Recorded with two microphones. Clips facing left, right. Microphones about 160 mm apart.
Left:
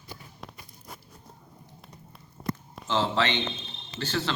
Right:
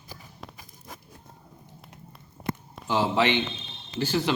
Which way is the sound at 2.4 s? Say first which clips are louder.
Right 1 dB; 10° right (ahead or behind).